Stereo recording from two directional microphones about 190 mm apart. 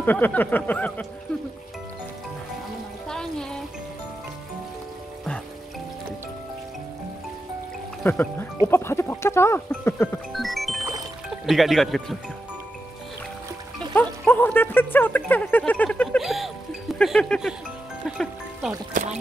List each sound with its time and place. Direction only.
0.0 s speech: 10° left (ahead or behind)
3.1 s a sound: 5° left (ahead or behind)
8.0 s speech: 10° left (ahead or behind)
10.3 s music: centre (ahead or behind)
11.2 s speech: centre (ahead or behind)
13.9 s a sound: 10° left (ahead or behind)
18.0 s music: centre (ahead or behind)
18.9 s speech: 45° right (ahead or behind)